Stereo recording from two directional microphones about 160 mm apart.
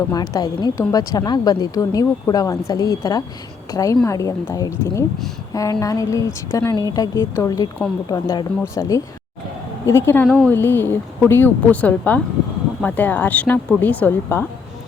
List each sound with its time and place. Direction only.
0.1 s a woman's voice: 25° left (ahead or behind)